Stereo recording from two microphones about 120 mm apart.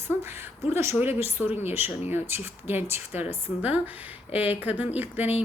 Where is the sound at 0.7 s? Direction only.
20° right (ahead or behind).